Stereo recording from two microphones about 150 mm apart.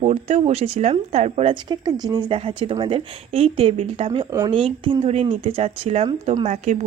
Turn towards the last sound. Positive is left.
turn(degrees=-50)  # may be behind; listen again after turning